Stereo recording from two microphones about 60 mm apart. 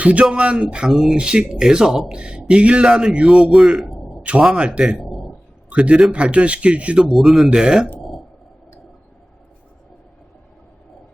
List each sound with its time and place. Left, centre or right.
0.0 s speech: right; by 3.9 s centre
4.2 s speech: centre
5.0 s a sound: centre
5.7 s speech: centre
7.1 s speech: centre